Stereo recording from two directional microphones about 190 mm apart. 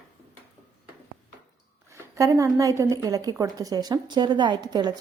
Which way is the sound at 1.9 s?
15° right (ahead or behind).